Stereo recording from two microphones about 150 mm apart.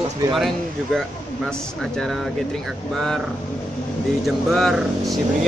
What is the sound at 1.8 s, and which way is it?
Speech, centre (ahead or behind).